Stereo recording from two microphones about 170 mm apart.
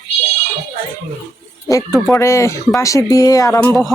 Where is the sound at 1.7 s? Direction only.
20° left (ahead or behind).